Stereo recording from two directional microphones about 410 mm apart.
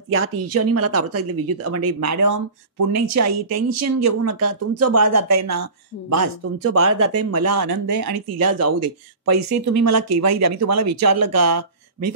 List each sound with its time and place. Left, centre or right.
0.1 s speech: right